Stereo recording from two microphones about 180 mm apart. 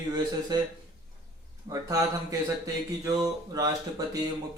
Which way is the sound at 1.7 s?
20° right (ahead or behind).